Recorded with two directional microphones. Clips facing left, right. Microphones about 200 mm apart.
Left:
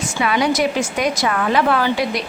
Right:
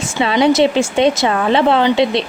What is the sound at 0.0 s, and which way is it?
Speech, 25° right (ahead or behind).